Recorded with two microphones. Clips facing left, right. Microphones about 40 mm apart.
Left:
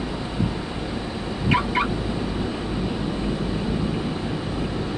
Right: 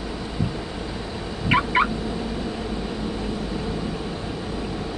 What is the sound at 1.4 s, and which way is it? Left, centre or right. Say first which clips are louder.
Fowl: right 2 dB; right.